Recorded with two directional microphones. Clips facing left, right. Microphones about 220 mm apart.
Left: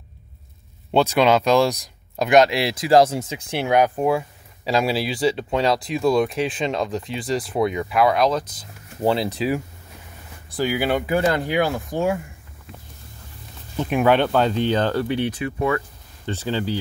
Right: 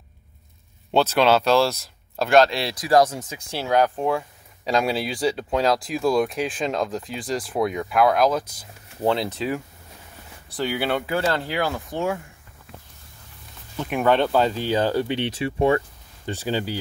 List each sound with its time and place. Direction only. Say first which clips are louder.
0.9 s speech: left 1 dB; 10° left (ahead or behind); by 8.6 s 10° right (ahead or behind)
9.0 s speech: left 2 dB; 5° left (ahead or behind)
13.7 s speech: left 4 dB; 20° left (ahead or behind)
14.0 s speech: left 1 dB; centre (ahead or behind)
15.0 s speech: left 2 dB; 25° right (ahead or behind)
16.3 s speech: left 1 dB; 10° right (ahead or behind)